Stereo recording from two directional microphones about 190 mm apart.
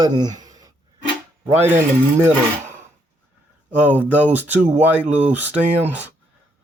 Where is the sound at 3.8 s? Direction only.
10° right (ahead or behind).